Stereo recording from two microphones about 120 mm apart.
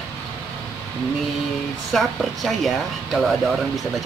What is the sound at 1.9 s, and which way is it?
Speech, centre (ahead or behind).